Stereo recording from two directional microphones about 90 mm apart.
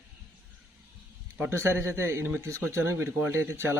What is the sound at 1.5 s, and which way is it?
Speech, 30° right (ahead or behind).